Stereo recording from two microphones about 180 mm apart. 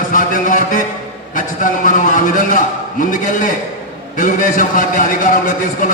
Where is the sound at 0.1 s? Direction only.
45° left (ahead or behind).